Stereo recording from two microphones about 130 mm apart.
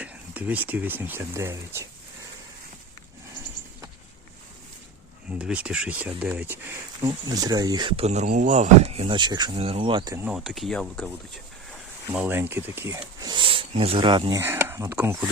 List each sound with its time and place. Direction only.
0.0 s speech: 10° right (ahead or behind)
5.4 s speech: 5° right (ahead or behind)
7.3 s speech: 30° right (ahead or behind)
7.9 s speech: 60° right (ahead or behind)
9.1 s speech: 35° right (ahead or behind)
9.6 s speech: 50° right (ahead or behind)
10.3 s speech: centre (ahead or behind)
12.1 s speech: 15° right (ahead or behind); by 14.3 s 40° right (ahead or behind)
14.3 s speech: 20° right (ahead or behind)
14.9 s speech: 10° right (ahead or behind)